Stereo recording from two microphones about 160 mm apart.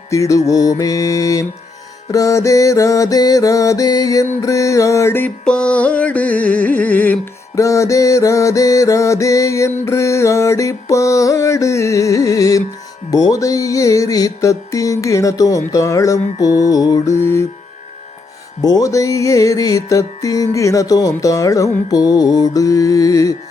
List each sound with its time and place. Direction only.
0.1 s music: 20° left (ahead or behind)
18.6 s music: 25° left (ahead or behind)